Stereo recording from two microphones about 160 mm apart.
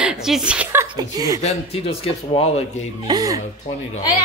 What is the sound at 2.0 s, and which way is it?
Speech, 40° left (ahead or behind).